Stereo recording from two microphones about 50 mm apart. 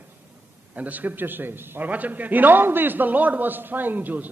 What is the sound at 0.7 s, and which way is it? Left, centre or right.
A man's voice, right.